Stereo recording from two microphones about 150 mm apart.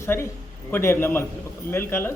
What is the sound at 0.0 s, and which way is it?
A man's voice, 20° left (ahead or behind).